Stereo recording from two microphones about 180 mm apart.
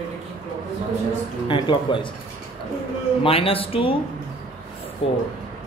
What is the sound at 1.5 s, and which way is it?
Speech, 25° left (ahead or behind).